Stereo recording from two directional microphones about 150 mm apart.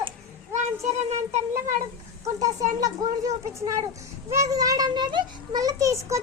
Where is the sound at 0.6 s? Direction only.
45° right (ahead or behind).